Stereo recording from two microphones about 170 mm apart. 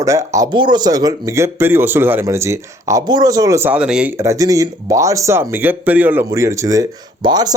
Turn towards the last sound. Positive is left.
turn(degrees=-25)  # may be behind; listen again after turning